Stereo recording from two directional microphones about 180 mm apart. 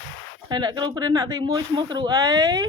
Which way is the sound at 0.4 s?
25° right (ahead or behind).